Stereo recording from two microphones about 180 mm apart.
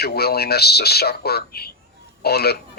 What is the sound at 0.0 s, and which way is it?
A man's voice, 60° left (ahead or behind).